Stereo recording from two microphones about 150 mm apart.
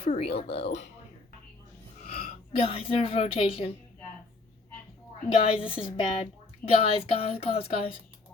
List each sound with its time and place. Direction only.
0.0 s speech: 40° left (ahead or behind)
2.0 s a sound: 70° left (ahead or behind)
2.6 s speech: 40° left (ahead or behind)
5.4 s speech: 35° left (ahead or behind)